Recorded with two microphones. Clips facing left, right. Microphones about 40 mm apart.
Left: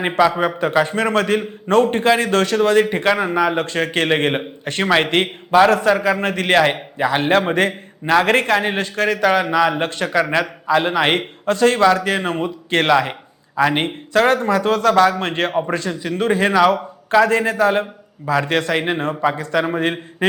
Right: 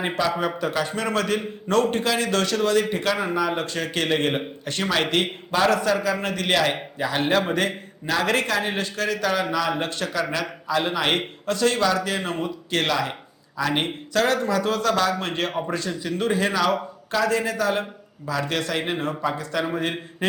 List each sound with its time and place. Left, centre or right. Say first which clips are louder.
0.3 s a man's voice: left 6 dB; left
3.6 s a man's voice: left 6 dB; left